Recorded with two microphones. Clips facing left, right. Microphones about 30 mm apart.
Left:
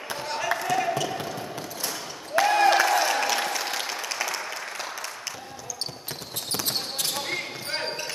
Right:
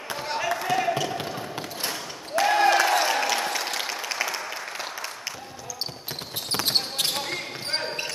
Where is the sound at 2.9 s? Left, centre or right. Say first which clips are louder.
Even; centre.